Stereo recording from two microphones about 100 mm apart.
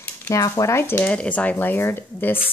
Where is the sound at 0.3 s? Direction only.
30° left (ahead or behind).